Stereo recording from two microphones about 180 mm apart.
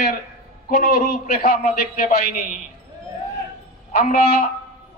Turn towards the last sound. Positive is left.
turn(degrees=50)  # may be behind; listen again after turning